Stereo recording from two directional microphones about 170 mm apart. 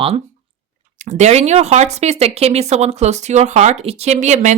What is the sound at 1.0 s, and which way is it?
Speech, 45° right (ahead or behind).